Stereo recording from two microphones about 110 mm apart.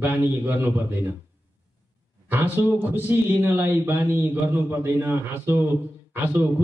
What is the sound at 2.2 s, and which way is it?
A man's voice, 15° right (ahead or behind).